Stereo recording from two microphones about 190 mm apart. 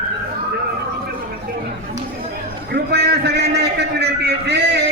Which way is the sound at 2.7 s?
60° right (ahead or behind).